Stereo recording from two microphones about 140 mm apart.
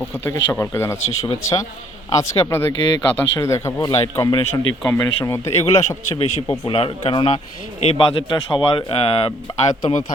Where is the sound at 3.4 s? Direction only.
20° left (ahead or behind).